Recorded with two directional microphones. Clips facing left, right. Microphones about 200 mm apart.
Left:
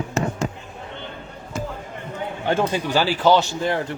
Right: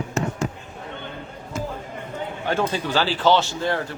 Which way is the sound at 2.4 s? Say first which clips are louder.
Left 2 dB; 20° left (ahead or behind).